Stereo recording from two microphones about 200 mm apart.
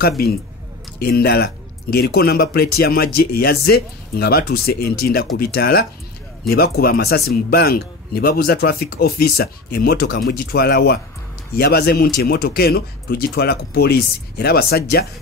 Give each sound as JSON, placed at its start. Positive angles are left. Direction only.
{"t": 0.9, "sound": "speech", "side_deg": 50}